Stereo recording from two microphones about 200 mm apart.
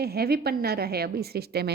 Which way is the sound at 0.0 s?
50° right (ahead or behind).